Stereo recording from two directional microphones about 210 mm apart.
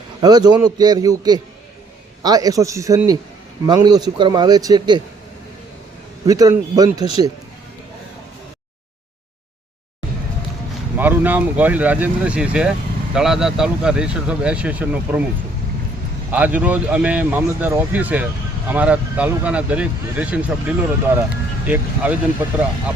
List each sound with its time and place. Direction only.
0.2 s a man's voice: 20° right (ahead or behind)
6.2 s speech: 15° right (ahead or behind)
10.9 s speech: 10° right (ahead or behind)
16.3 s speech: 5° right (ahead or behind)